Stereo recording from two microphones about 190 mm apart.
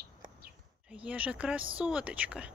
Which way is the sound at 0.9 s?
5° right (ahead or behind).